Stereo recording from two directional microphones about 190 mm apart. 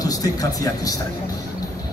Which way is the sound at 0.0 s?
20° left (ahead or behind).